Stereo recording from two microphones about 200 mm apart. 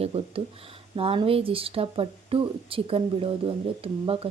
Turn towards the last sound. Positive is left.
turn(degrees=-30)  # may be behind; listen again after turning